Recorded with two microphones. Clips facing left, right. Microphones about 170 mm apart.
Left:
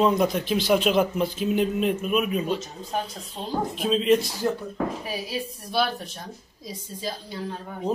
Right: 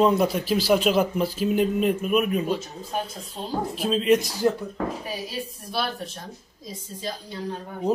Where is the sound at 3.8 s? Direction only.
Centre (ahead or behind).